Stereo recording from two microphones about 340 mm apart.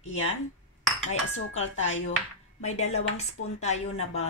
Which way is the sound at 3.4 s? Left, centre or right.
Left.